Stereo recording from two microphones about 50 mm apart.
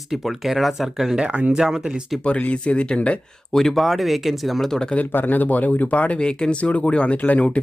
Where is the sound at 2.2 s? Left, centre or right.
Left.